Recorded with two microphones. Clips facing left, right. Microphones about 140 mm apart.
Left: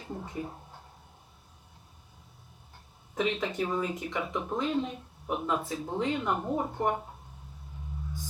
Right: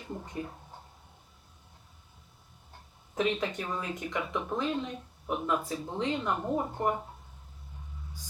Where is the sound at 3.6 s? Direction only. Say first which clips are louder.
Left 5 dB; 15° left (ahead or behind).